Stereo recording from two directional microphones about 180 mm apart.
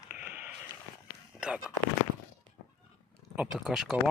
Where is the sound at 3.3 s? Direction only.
5° right (ahead or behind).